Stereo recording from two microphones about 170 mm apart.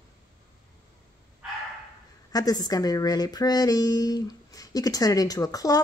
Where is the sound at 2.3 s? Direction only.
20° left (ahead or behind).